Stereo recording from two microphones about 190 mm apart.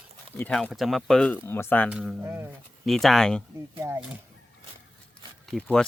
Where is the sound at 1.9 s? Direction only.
5° right (ahead or behind).